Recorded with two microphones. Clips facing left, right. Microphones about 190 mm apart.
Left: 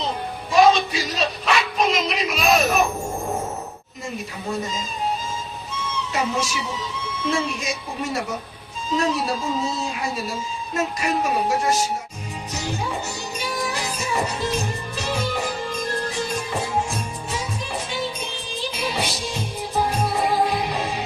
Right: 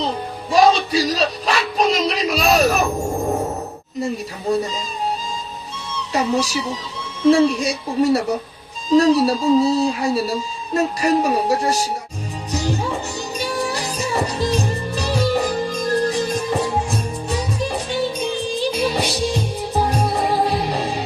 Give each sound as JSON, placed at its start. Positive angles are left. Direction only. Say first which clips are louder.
{"t": 0.5, "sound": "a sound", "louder": "right 2 dB", "side_deg": -35}
{"t": 6.1, "sound": "speech", "louder": "right 6 dB", "side_deg": -35}
{"t": 12.5, "sound": "music", "louder": "right 6 dB", "side_deg": -35}
{"t": 18.7, "sound": "music", "louder": "right 6 dB", "side_deg": -40}